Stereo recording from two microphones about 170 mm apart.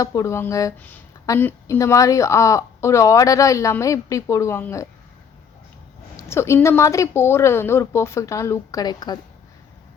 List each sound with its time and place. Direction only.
0.0 s a woman's voice: 20° left (ahead or behind)
6.1 s a woman's voice: 15° left (ahead or behind)